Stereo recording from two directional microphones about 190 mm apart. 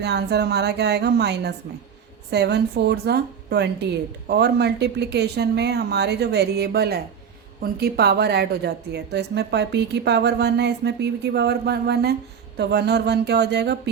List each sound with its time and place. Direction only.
0.0 s a woman's voice: 60° right (ahead or behind)